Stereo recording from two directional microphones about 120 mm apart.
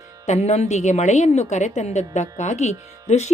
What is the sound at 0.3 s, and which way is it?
A woman's voice, 65° left (ahead or behind).